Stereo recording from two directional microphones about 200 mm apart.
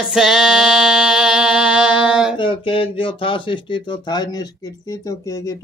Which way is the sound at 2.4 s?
25° left (ahead or behind).